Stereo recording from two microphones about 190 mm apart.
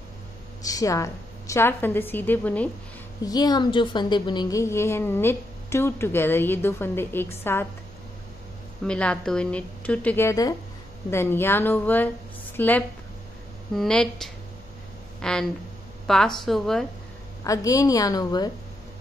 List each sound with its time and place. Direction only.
0.6 s a woman's voice: 20° left (ahead or behind)
3.3 s a woman's voice: 20° left (ahead or behind)
8.8 s a woman's voice: 5° left (ahead or behind)
17.4 s a woman's voice: 15° left (ahead or behind)